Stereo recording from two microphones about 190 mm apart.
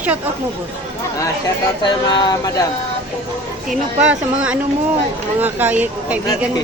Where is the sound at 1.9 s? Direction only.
25° left (ahead or behind).